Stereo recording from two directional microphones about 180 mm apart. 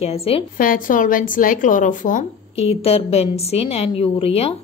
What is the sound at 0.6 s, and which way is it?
A woman's voice, 50° left (ahead or behind).